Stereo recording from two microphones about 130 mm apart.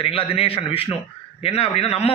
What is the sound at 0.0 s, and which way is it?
A man's voice, 45° left (ahead or behind).